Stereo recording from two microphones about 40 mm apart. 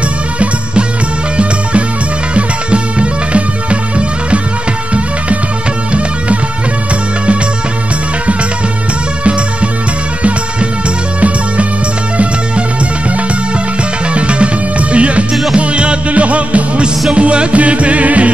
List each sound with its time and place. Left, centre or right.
1.3 s music: right
9.2 s music: right
11.1 s music: right
14.1 s music: right